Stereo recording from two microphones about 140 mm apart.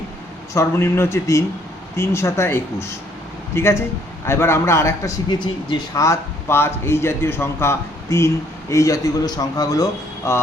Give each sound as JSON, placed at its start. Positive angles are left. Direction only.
{"t": 0.5, "sound": "a man's voice", "side_deg": 20}